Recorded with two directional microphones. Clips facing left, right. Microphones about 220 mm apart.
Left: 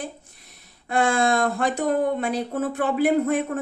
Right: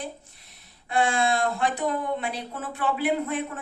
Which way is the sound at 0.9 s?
45° left (ahead or behind).